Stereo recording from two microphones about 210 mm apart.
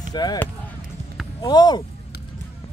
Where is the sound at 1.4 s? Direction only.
20° left (ahead or behind).